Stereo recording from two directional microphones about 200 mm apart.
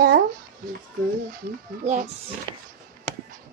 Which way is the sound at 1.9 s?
35° right (ahead or behind).